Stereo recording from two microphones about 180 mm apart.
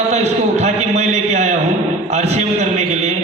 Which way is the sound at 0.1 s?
35° right (ahead or behind).